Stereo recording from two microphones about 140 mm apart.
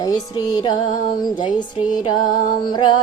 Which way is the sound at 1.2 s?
30° left (ahead or behind).